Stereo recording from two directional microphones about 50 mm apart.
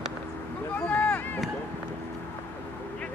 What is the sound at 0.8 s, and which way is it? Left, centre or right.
Boat, left.